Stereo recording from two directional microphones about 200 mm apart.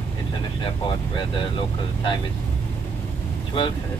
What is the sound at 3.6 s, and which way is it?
Speech, 25° left (ahead or behind).